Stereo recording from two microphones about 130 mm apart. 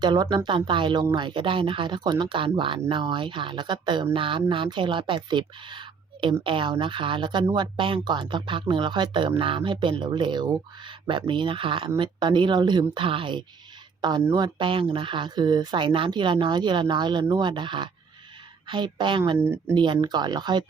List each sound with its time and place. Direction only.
0.0 s speech: 35° right (ahead or behind)